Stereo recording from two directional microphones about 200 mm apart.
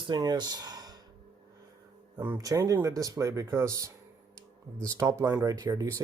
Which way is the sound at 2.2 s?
15° right (ahead or behind).